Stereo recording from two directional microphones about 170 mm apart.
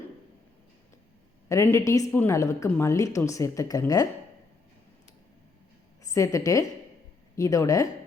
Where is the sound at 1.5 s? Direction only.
15° left (ahead or behind).